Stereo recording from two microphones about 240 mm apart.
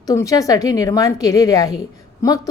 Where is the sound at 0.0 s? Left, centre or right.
Centre.